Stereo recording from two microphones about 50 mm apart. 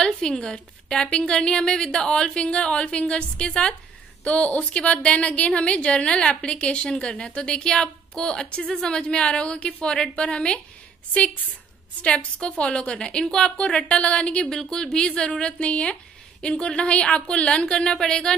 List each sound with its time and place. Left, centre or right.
0.0 s a woman's voice: centre
12.0 s a woman's voice: left
13.8 s a woman's voice: left
14.4 s a woman's voice: centre